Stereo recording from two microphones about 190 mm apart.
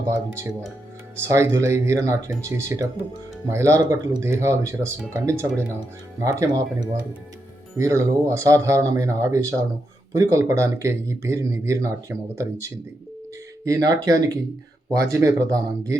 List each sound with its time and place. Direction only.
1.1 s speech: 15° right (ahead or behind)